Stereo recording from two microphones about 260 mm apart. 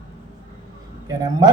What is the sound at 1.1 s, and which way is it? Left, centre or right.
Speech, centre.